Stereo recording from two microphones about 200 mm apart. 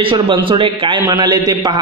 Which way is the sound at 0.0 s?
25° right (ahead or behind).